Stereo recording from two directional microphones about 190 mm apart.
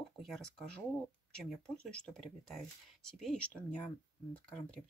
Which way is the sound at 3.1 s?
Centre (ahead or behind).